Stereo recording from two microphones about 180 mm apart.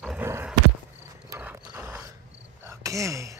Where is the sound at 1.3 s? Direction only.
10° right (ahead or behind).